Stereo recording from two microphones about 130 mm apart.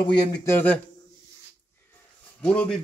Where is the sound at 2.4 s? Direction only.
10° left (ahead or behind).